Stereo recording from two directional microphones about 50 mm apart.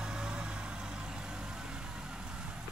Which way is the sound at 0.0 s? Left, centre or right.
Centre.